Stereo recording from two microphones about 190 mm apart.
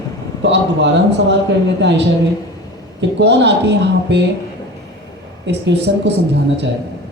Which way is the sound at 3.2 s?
65° right (ahead or behind).